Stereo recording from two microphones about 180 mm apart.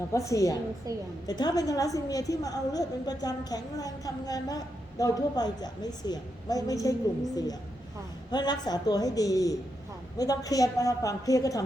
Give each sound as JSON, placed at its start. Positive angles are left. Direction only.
{"t": 0.1, "sound": "a woman's voice", "side_deg": 15}
{"t": 0.9, "sound": "a woman's voice", "side_deg": -20}
{"t": 1.3, "sound": "a woman's voice", "side_deg": 20}
{"t": 8.3, "sound": "a woman's voice", "side_deg": 25}